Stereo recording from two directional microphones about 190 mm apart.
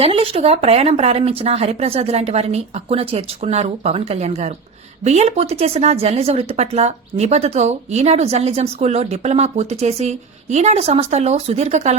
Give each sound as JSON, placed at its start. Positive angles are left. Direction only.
{"t": 0.0, "sound": "a woman's voice", "side_deg": -30}